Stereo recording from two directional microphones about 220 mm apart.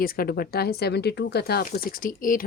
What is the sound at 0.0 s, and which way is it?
Speech, 40° left (ahead or behind).